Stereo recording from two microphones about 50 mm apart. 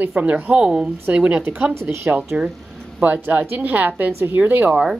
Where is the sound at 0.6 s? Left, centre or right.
Centre.